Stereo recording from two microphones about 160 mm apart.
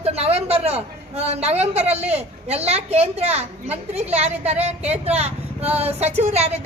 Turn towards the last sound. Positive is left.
turn(degrees=-40)  # may be behind; listen again after turning